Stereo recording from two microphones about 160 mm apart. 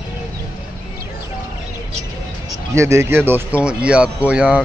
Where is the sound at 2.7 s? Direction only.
15° right (ahead or behind).